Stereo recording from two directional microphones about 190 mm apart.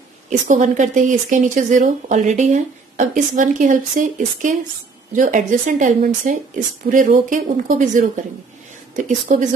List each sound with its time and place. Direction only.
0.5 s speech: 40° right (ahead or behind)